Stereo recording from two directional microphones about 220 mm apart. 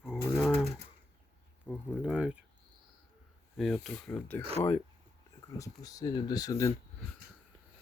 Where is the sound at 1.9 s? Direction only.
5° right (ahead or behind).